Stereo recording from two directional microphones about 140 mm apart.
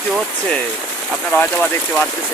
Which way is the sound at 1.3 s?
10° left (ahead or behind).